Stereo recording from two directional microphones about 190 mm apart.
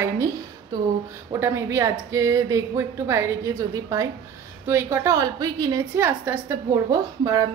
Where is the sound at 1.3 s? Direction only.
15° right (ahead or behind).